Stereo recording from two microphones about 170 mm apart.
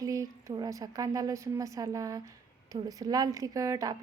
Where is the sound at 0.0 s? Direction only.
20° right (ahead or behind).